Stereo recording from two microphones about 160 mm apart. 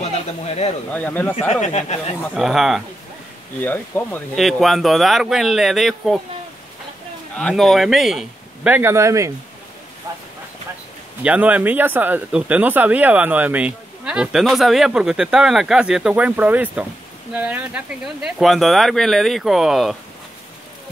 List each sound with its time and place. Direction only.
0.9 s speech: 10° left (ahead or behind)
1.5 s speech: 45° left (ahead or behind)
2.3 s speech: centre (ahead or behind)
3.6 s speech: 10° left (ahead or behind)
4.4 s speech: centre (ahead or behind)
7.3 s speech: 5° left (ahead or behind); by 9.3 s 20° right (ahead or behind)
11.2 s speech: 10° right (ahead or behind)